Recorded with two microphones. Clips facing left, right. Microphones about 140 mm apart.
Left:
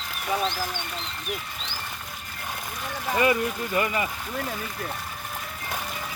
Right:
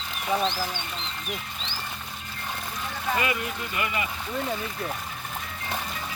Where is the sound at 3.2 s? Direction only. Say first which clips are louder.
Left 6 dB; 35° left (ahead or behind).